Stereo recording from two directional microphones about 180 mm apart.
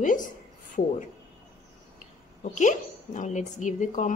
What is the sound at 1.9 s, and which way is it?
A woman's voice, 45° left (ahead or behind).